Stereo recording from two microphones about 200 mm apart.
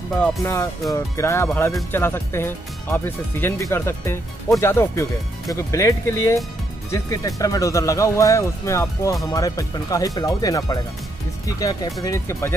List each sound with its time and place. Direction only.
0.4 s speech: 15° left (ahead or behind)